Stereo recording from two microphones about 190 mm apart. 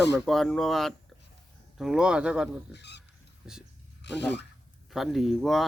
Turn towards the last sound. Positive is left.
turn(degrees=0)  # may be behind; listen again after turning